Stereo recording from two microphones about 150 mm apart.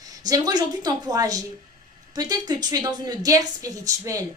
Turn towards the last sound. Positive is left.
turn(degrees=-20)  # may be behind; listen again after turning